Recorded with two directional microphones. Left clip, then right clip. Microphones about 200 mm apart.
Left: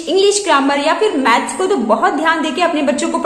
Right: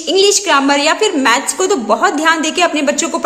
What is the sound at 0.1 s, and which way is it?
A woman's voice, 30° right (ahead or behind).